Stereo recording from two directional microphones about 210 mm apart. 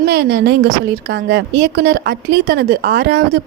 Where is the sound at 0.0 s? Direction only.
50° right (ahead or behind).